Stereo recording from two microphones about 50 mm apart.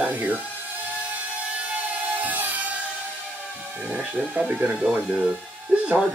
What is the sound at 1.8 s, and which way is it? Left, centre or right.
Music, right.